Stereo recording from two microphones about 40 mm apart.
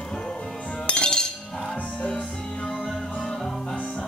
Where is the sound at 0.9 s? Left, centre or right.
Left.